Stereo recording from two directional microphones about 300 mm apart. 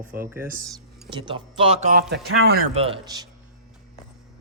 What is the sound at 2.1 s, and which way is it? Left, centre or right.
Speech, right.